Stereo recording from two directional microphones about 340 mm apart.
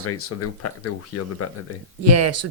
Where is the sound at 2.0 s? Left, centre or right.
Right.